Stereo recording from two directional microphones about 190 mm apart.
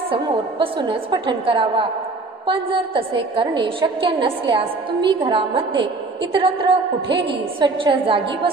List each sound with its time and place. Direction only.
0.1 s a woman's voice: 30° right (ahead or behind)